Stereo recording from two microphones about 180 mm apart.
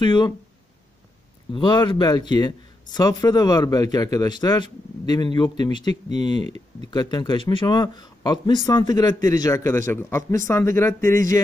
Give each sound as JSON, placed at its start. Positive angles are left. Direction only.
{"t": 0.0, "sound": "speech", "side_deg": 25}
{"t": 1.5, "sound": "speech", "side_deg": 25}
{"t": 6.4, "sound": "speech", "side_deg": -35}
{"t": 6.9, "sound": "speech", "side_deg": 25}